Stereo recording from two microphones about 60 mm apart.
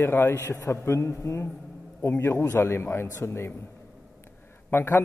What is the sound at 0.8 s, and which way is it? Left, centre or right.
A man's voice, left.